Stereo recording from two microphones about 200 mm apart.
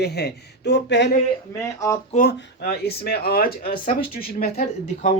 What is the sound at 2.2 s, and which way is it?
Speech, 50° left (ahead or behind).